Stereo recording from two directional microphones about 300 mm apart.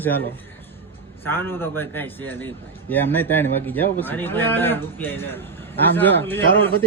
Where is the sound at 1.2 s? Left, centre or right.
Centre.